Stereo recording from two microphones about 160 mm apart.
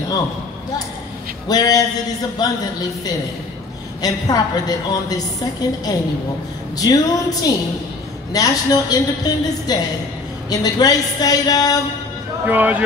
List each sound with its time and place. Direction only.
1.5 s a woman's voice: 25° left (ahead or behind)
4.0 s a woman's voice: 25° left (ahead or behind)
12.4 s speech: 10° right (ahead or behind)